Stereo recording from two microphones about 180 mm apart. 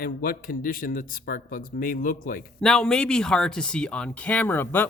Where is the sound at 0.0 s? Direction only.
55° left (ahead or behind).